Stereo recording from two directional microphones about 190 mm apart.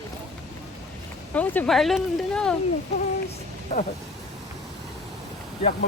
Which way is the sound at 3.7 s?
35° left (ahead or behind).